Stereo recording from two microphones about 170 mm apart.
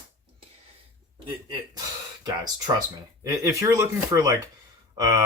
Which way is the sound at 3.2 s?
20° right (ahead or behind).